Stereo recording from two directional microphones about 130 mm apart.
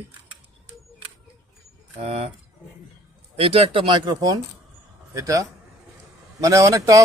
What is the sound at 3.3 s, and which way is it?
Speech, 50° right (ahead or behind).